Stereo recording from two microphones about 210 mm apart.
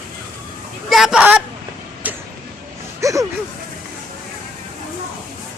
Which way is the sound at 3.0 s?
15° right (ahead or behind).